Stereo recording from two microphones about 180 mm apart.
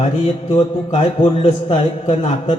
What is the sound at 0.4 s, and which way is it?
A man's voice, 30° left (ahead or behind).